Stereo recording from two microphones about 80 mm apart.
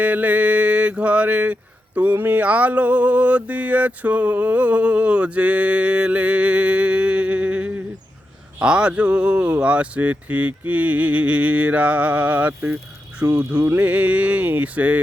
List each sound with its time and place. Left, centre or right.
0.0 s mantra: centre
13.2 s speech: right
13.8 s music: centre